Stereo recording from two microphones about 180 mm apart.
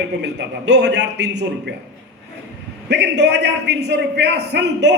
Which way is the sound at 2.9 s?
70° right (ahead or behind).